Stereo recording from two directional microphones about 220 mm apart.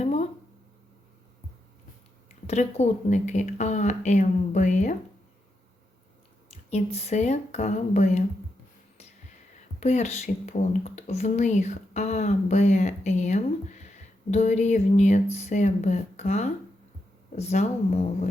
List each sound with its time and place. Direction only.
0.0 s a sound: 30° left (ahead or behind)
2.5 s speech: 30° left (ahead or behind)
6.5 s speech: 30° left (ahead or behind)
9.8 s speech: 30° left (ahead or behind)